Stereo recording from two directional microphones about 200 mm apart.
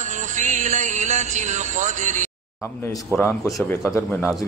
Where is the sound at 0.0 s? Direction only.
40° right (ahead or behind).